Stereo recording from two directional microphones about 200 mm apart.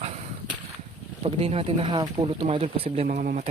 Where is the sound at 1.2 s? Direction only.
30° right (ahead or behind).